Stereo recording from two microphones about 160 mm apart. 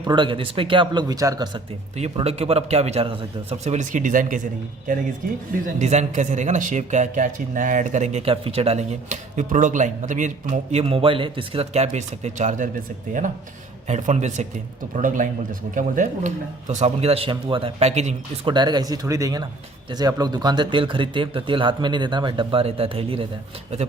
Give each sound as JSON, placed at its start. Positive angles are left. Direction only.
{"t": 0.0, "sound": "speech", "side_deg": -30}
{"t": 2.0, "sound": "speech", "side_deg": -40}
{"t": 5.6, "sound": "speech", "side_deg": -45}
{"t": 13.8, "sound": "speech", "side_deg": -45}
{"t": 18.4, "sound": "speech", "side_deg": -30}